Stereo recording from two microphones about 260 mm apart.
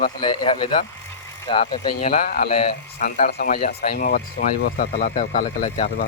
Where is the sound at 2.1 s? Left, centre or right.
Left.